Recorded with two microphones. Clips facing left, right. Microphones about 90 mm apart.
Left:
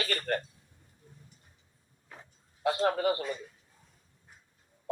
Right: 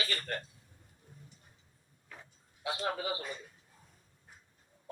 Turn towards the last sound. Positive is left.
turn(degrees=50)  # may be behind; listen again after turning